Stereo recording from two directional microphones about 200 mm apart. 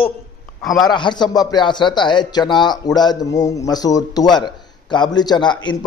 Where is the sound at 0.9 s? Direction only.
20° left (ahead or behind).